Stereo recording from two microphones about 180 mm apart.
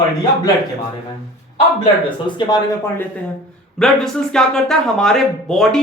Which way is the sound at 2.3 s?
25° left (ahead or behind).